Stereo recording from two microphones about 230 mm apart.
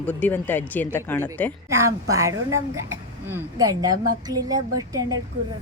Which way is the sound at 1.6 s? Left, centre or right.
Centre.